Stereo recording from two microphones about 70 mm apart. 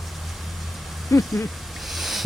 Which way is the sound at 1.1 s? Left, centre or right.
Left.